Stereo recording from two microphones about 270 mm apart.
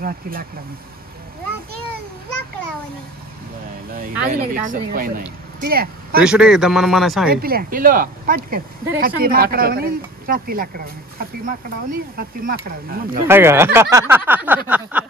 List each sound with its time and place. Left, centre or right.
0.0 s speech: right
4.3 s speech: right
6.1 s speech: centre
7.2 s speech: right
13.3 s speech: centre
14.7 s a sound: centre